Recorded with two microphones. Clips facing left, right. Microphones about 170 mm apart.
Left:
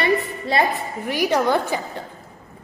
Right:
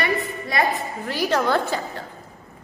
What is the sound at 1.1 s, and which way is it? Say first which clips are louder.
Speech: left 2 dB; 15° left (ahead or behind).